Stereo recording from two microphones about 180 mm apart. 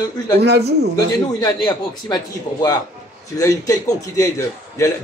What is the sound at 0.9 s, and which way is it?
A man's voice, 20° left (ahead or behind).